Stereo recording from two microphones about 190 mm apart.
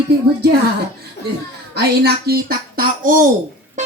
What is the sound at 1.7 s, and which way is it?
Speech, 60° right (ahead or behind).